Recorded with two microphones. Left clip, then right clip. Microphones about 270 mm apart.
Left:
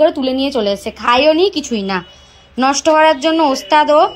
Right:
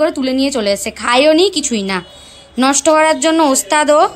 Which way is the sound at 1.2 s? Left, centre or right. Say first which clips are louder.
Right 4 dB; right.